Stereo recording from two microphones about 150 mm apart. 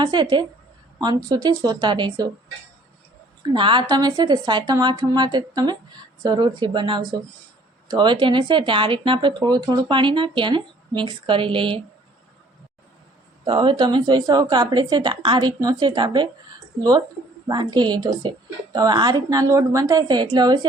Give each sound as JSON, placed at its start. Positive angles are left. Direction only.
{"t": 0.0, "sound": "a woman's voice", "side_deg": -30}
{"t": 3.4, "sound": "a woman's voice", "side_deg": -35}
{"t": 13.4, "sound": "a woman's voice", "side_deg": -30}
{"t": 17.5, "sound": "a woman's voice", "side_deg": -25}